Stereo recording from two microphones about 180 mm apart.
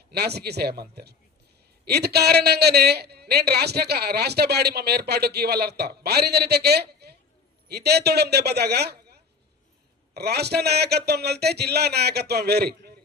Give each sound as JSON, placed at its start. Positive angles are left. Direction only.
{"t": 0.1, "sound": "a woman's voice", "side_deg": -65}
{"t": 10.2, "sound": "a woman's voice", "side_deg": -65}